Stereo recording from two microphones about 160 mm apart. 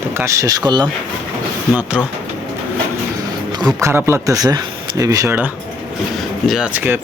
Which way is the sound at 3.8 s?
15° right (ahead or behind).